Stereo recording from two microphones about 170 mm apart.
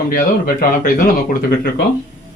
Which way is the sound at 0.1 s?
55° left (ahead or behind).